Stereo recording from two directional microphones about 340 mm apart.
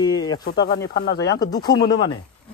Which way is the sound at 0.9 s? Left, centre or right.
Left.